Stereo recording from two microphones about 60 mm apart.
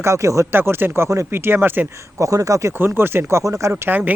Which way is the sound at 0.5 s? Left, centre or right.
Right.